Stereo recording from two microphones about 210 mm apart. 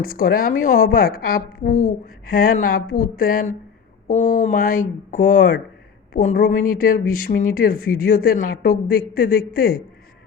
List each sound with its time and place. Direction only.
0.1 s a woman's voice: 45° left (ahead or behind)